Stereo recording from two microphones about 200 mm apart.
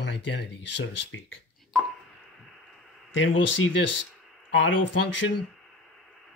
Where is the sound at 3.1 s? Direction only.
65° left (ahead or behind).